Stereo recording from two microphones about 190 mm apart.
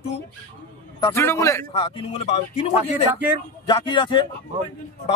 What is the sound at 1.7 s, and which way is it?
A man's voice, 30° left (ahead or behind).